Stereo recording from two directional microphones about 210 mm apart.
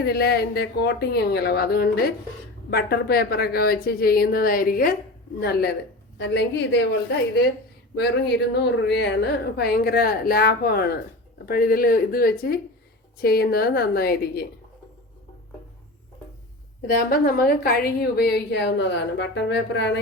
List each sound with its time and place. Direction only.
0.0 s a woman's voice: 50° left (ahead or behind)
7.9 s a woman's voice: 50° left (ahead or behind)
16.8 s a woman's voice: 45° left (ahead or behind)